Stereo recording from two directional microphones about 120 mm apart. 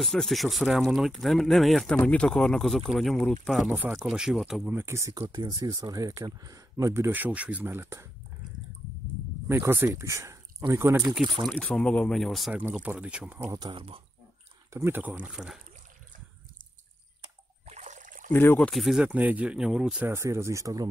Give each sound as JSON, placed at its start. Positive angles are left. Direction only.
{"t": 0.0, "sound": "speech", "side_deg": 0}
{"t": 4.6, "sound": "speech", "side_deg": -20}
{"t": 9.5, "sound": "speech", "side_deg": -20}
{"t": 11.5, "sound": "speech", "side_deg": 5}
{"t": 13.6, "sound": "speech", "side_deg": -40}
{"t": 14.7, "sound": "speech", "side_deg": -20}
{"t": 17.6, "sound": "trickle", "side_deg": -75}
{"t": 18.3, "sound": "speech", "side_deg": 20}
{"t": 18.6, "sound": "speech", "side_deg": 0}
{"t": 20.1, "sound": "speech", "side_deg": -25}